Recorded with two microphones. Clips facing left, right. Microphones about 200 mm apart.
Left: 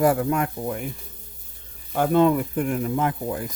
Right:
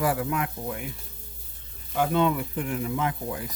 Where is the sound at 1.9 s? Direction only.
45° left (ahead or behind).